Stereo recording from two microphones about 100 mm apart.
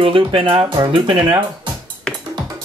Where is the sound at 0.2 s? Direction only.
60° right (ahead or behind).